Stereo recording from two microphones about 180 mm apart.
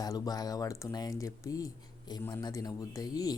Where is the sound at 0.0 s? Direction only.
20° left (ahead or behind).